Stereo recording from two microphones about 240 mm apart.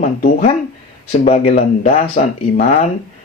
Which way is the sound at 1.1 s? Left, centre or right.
Left.